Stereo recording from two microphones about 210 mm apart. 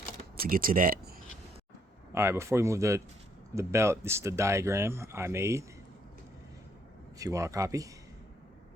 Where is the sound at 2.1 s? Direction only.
15° right (ahead or behind).